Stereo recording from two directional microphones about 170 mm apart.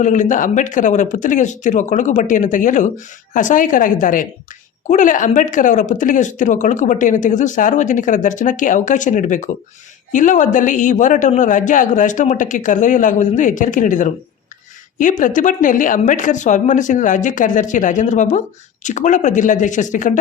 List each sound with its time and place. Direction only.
0.0 s speech: 45° left (ahead or behind)